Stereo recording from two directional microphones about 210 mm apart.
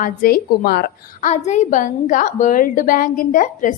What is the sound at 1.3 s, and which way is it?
A woman's voice, 35° left (ahead or behind).